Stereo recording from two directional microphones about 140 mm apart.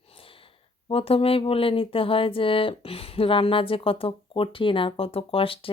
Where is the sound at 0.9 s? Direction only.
45° left (ahead or behind).